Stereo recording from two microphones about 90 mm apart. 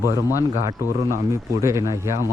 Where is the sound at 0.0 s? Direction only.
35° right (ahead or behind).